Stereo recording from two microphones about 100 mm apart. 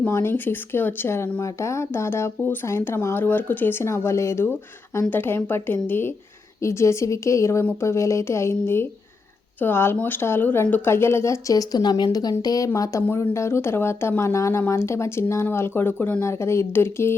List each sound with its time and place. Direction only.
0.0 s speech: 25° left (ahead or behind)